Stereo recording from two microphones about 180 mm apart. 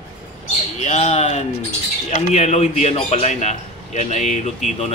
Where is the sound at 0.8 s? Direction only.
40° left (ahead or behind).